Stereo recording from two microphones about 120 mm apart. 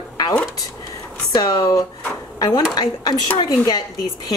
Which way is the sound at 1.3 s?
30° left (ahead or behind).